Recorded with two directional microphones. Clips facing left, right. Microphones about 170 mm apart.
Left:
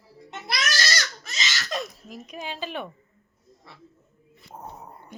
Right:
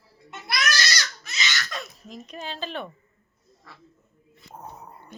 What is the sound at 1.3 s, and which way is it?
Laughter, 40° left (ahead or behind).